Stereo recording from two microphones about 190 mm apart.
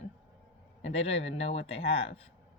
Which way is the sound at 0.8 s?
30° left (ahead or behind).